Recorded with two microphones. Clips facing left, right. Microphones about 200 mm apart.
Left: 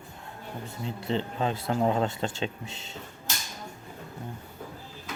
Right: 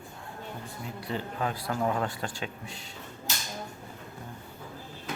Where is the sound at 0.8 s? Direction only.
25° left (ahead or behind).